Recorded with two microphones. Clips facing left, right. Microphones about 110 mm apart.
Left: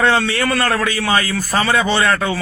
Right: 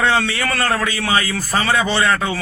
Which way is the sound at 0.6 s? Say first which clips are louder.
Right 2 dB; 30° right (ahead or behind).